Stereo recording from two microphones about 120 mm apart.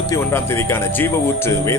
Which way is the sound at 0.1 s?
20° left (ahead or behind).